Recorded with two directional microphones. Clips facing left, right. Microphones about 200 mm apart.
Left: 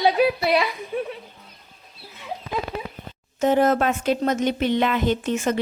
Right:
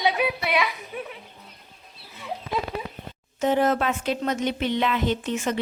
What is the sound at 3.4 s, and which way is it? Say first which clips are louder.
Speech: left 3 dB; 45° left (ahead or behind).